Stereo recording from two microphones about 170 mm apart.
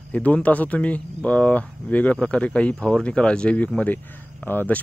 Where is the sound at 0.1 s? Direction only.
10° left (ahead or behind).